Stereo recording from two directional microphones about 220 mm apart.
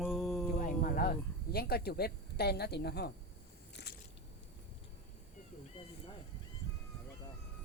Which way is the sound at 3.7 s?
50° left (ahead or behind).